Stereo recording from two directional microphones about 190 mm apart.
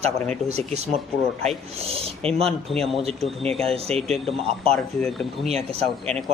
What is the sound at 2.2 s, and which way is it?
Speech, 5° left (ahead or behind).